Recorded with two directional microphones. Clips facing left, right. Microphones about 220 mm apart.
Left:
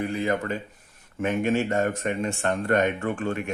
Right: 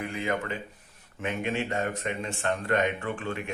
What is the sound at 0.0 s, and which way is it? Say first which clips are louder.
Speech: left 5 dB; 35° left (ahead or behind).